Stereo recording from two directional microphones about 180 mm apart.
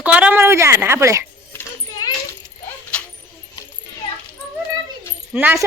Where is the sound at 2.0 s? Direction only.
20° left (ahead or behind).